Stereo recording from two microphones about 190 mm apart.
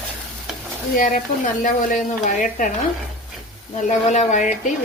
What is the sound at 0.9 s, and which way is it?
Speech, 45° left (ahead or behind).